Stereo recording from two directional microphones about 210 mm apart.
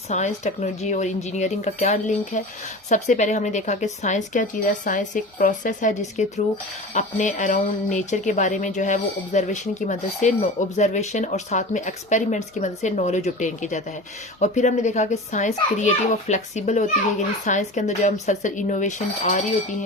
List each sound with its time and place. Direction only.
0.1 s speech: 35° left (ahead or behind)